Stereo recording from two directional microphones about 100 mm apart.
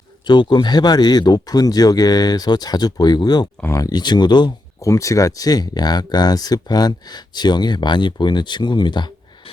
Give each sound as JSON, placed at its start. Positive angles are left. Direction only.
{"t": 0.3, "sound": "speech", "side_deg": 50}
{"t": 4.8, "sound": "speech", "side_deg": 30}